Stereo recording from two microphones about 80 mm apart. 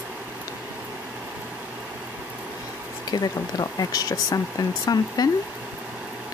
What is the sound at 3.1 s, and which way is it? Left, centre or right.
Speech, left.